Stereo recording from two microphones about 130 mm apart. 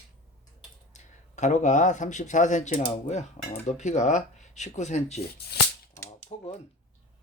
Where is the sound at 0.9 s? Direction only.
65° left (ahead or behind).